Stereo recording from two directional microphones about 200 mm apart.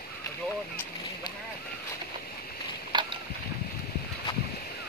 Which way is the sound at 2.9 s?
25° right (ahead or behind).